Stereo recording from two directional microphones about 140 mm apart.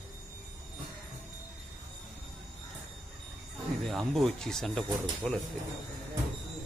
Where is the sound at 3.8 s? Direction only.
Centre (ahead or behind).